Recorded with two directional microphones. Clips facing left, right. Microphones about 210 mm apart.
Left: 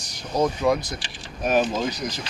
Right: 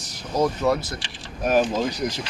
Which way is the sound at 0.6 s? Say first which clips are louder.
Even; 15° left (ahead or behind).